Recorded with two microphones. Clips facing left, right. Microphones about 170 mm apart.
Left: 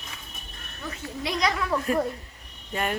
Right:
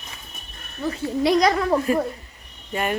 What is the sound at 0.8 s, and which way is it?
Speech, 35° right (ahead or behind).